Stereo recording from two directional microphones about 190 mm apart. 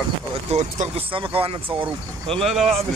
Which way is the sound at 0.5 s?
35° right (ahead or behind).